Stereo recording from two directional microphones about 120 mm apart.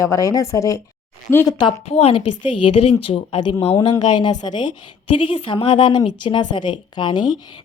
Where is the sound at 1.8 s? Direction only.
60° left (ahead or behind).